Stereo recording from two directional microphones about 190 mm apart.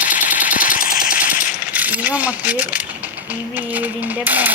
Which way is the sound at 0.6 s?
45° left (ahead or behind).